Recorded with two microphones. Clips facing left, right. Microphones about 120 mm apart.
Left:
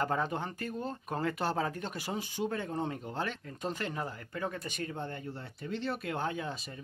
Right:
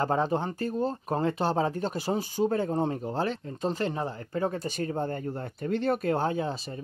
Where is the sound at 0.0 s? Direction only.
30° right (ahead or behind); by 6.1 s 50° right (ahead or behind).